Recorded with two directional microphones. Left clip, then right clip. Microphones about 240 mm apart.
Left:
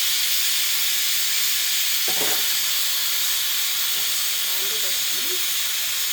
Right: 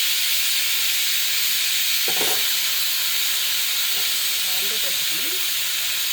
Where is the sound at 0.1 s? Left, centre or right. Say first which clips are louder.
Right 1 dB; left.